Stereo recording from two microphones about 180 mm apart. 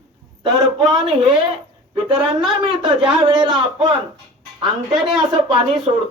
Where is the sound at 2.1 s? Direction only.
30° right (ahead or behind).